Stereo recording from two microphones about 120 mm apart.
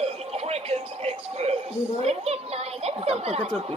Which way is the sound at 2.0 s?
60° right (ahead or behind).